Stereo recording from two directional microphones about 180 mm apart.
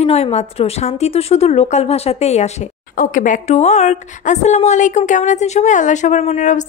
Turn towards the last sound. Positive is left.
turn(degrees=40)  # may be behind; listen again after turning